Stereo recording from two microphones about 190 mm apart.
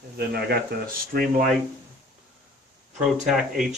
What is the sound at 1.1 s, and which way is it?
Speech, 50° right (ahead or behind).